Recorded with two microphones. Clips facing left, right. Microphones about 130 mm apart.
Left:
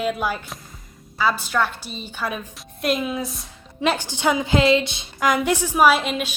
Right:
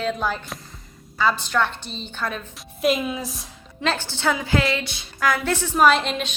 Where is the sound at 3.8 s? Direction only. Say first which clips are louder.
Left 3 dB; 15° left (ahead or behind).